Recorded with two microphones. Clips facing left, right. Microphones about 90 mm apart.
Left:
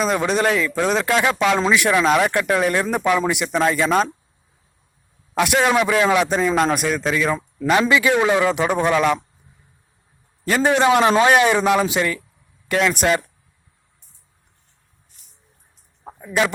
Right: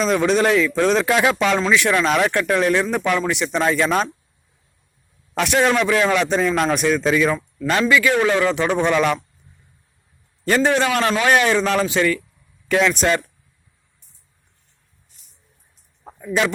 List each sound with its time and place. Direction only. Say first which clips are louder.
0.0 s a man's voice: right 2 dB; 5° left (ahead or behind)
5.3 s a man's voice: even; 5° left (ahead or behind)
7.7 s a man's voice: left 1 dB; 20° left (ahead or behind)
10.4 s a man's voice: left 1 dB; 10° left (ahead or behind)
16.0 s a sound: right 2 dB; 15° left (ahead or behind)